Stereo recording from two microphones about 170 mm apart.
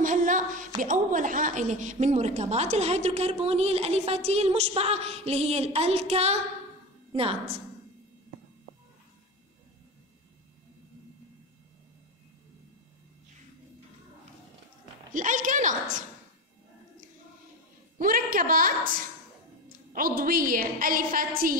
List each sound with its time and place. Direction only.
0.0 s a sound: 50° right (ahead or behind)
0.7 s a woman's voice: 50° right (ahead or behind)
15.1 s a woman's voice: 50° right (ahead or behind)
17.9 s a woman's voice: 55° right (ahead or behind)